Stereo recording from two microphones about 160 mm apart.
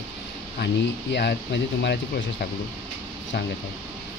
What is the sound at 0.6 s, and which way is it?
Speech, 90° left.